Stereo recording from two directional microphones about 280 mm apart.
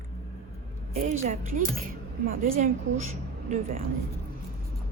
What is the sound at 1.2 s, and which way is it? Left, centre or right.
Speech, right.